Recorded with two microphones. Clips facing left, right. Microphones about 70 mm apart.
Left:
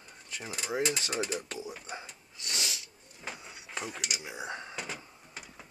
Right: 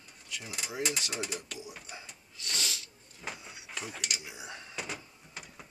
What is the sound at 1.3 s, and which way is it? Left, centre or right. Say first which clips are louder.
Speech: left 5 dB; left.